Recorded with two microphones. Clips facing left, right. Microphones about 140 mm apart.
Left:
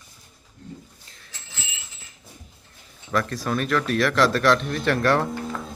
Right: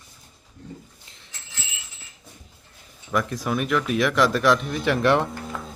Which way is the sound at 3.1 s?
15° right (ahead or behind).